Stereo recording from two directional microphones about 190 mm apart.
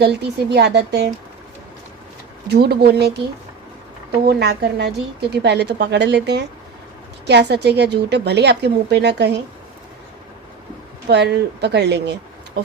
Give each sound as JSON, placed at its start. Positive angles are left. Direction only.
{"t": 0.0, "sound": "a woman's voice", "side_deg": -60}
{"t": 2.5, "sound": "a woman's voice", "side_deg": -55}
{"t": 4.3, "sound": "a woman's voice", "side_deg": -60}
{"t": 11.1, "sound": "a woman's voice", "side_deg": -60}